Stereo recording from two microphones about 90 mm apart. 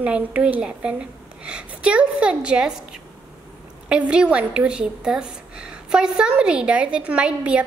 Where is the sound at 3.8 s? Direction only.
15° right (ahead or behind).